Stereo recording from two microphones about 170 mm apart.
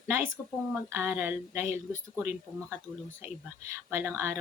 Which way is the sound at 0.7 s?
10° right (ahead or behind).